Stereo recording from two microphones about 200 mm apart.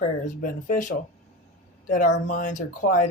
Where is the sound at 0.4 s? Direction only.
40° left (ahead or behind).